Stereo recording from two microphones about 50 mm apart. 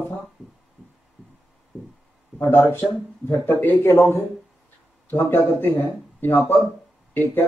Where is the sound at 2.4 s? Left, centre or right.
Left.